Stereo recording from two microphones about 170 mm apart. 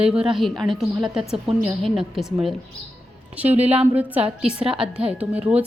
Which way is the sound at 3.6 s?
10° right (ahead or behind).